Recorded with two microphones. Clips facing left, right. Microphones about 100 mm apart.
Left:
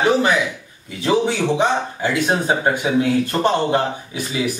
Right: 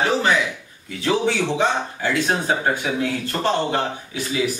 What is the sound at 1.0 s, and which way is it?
Speech, 20° left (ahead or behind).